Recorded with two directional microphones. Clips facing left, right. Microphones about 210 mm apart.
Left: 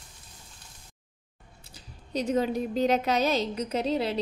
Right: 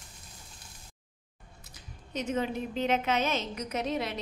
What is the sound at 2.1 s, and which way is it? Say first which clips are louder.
A woman's voice: left 5 dB; 35° left (ahead or behind).